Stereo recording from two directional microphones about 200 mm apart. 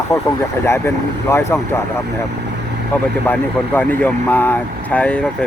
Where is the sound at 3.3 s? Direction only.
10° left (ahead or behind).